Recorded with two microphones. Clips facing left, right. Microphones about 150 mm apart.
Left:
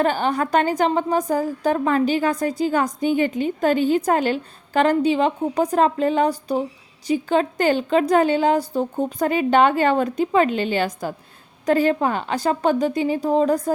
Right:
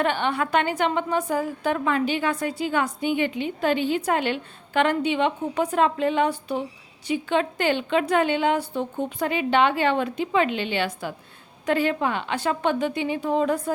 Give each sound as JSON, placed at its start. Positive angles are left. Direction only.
{"t": 0.0, "sound": "a woman's voice", "side_deg": 40}